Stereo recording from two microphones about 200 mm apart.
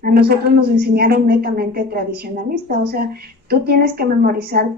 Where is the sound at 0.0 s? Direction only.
50° right (ahead or behind).